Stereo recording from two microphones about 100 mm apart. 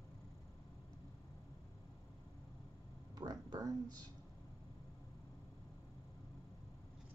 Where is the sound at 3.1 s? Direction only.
40° right (ahead or behind).